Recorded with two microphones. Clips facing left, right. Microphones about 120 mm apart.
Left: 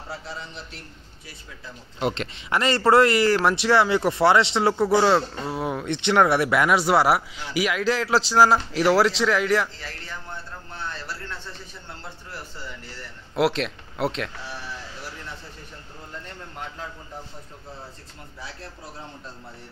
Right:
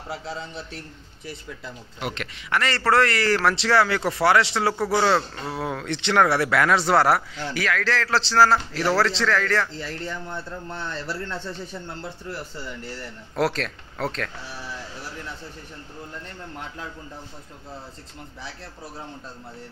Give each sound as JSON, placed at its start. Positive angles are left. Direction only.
{"t": 2.0, "sound": "a man's voice", "side_deg": 25}
{"t": 6.8, "sound": "speech", "side_deg": 5}
{"t": 13.4, "sound": "speech", "side_deg": 5}